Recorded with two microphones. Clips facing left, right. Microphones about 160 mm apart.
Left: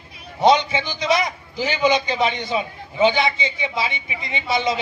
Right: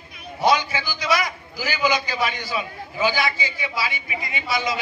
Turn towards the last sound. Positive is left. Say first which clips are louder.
# left 4 dB
turn(degrees=25)  # may be behind; listen again after turning